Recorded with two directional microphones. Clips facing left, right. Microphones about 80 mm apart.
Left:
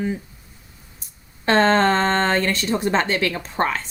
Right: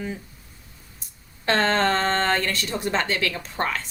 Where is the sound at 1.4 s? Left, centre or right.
Left.